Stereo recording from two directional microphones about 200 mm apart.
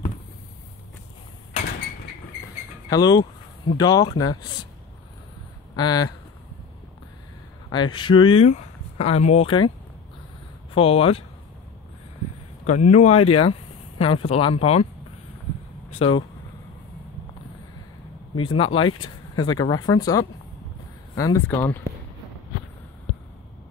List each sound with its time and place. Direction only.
2.9 s speech: 20° left (ahead or behind)
5.8 s speech: 20° left (ahead or behind)
7.7 s speech: 25° left (ahead or behind)
10.7 s speech: 30° left (ahead or behind)
12.6 s speech: 35° left (ahead or behind)
16.0 s speech: 25° left (ahead or behind)
18.4 s speech: 25° left (ahead or behind); by 21.7 s 10° left (ahead or behind)